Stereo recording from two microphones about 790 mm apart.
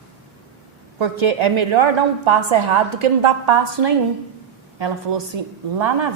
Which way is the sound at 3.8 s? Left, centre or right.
Right.